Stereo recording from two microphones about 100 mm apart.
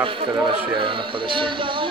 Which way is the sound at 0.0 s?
55° right (ahead or behind).